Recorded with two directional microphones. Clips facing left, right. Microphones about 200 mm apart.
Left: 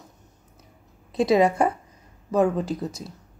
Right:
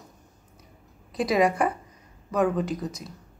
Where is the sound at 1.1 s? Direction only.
25° left (ahead or behind).